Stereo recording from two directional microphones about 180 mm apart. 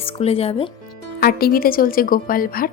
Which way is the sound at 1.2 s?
55° left (ahead or behind).